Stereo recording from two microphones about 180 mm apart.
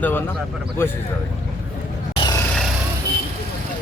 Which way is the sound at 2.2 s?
20° left (ahead or behind).